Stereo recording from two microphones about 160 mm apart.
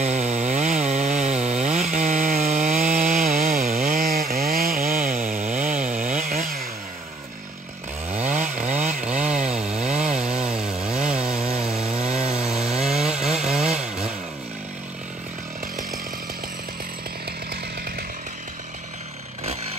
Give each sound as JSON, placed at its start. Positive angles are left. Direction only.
{"t": 0.0, "sound": "chainsaw", "side_deg": -45}
{"t": 3.7, "sound": "chainsaw", "side_deg": -65}
{"t": 8.1, "sound": "chainsaw", "side_deg": -45}
{"t": 9.0, "sound": "chainsaw", "side_deg": -10}
{"t": 9.8, "sound": "chainsaw", "side_deg": -45}
{"t": 10.0, "sound": "chainsaw", "side_deg": -5}
{"t": 10.5, "sound": "wood", "side_deg": -5}
{"t": 11.4, "sound": "sawing", "side_deg": -40}
{"t": 12.4, "sound": "wood", "side_deg": -5}
{"t": 13.0, "sound": "chainsaw", "side_deg": -5}